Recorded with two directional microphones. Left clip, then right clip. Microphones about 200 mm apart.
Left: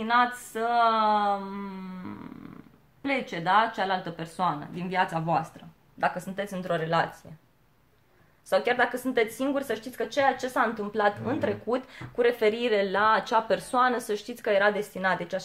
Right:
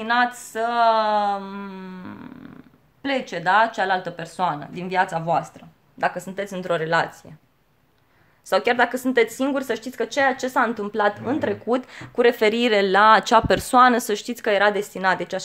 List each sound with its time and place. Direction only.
0.0 s speech: 35° right (ahead or behind)
8.5 s speech: 45° right (ahead or behind)